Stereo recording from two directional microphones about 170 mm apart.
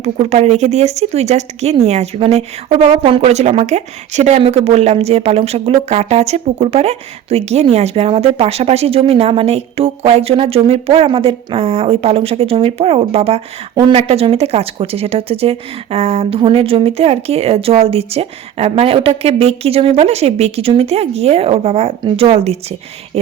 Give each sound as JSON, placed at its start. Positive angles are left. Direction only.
{"t": 0.0, "sound": "speech", "side_deg": -40}